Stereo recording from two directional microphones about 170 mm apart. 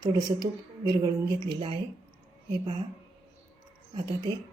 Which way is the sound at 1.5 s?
30° right (ahead or behind).